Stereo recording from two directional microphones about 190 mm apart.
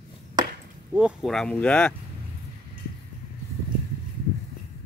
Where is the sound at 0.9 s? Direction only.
5° right (ahead or behind).